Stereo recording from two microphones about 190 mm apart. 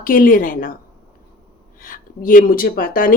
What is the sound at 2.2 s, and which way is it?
Speech, 45° left (ahead or behind).